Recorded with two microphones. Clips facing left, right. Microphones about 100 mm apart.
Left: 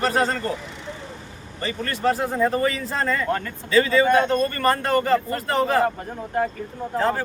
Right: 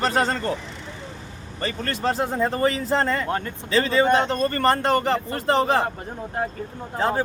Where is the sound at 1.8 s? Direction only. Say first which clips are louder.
Left 2 dB; 25° right (ahead or behind).